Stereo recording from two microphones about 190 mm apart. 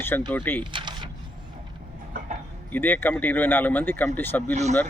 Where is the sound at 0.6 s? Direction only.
25° right (ahead or behind).